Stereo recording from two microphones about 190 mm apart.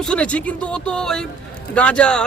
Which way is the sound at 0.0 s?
5° left (ahead or behind).